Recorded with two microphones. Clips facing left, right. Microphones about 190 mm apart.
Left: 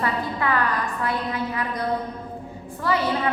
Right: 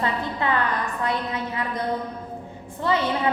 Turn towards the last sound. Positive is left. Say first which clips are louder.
# even
turn(degrees=-20)  # may be behind; listen again after turning